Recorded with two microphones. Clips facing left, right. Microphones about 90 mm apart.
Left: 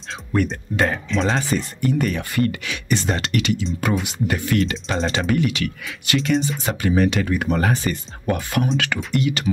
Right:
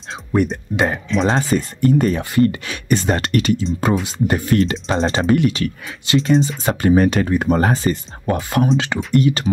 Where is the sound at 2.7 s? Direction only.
45° right (ahead or behind); by 9.0 s 25° right (ahead or behind).